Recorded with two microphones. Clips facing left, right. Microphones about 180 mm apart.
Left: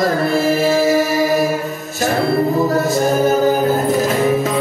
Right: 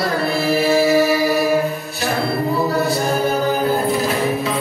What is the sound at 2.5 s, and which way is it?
A capella, 45° left (ahead or behind).